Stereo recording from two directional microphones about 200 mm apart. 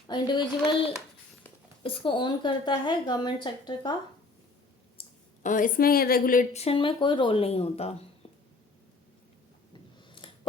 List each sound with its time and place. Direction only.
0.1 s a woman's voice: 20° left (ahead or behind)
4.9 s a woman's voice: 40° left (ahead or behind)
10.2 s scissors: 25° left (ahead or behind)